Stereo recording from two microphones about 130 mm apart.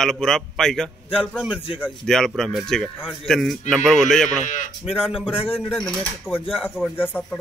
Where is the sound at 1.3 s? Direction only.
5° right (ahead or behind).